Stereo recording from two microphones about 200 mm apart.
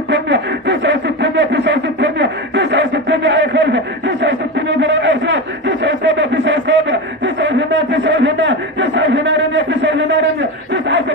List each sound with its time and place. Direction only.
0.1 s chuckle: 65° right (ahead or behind)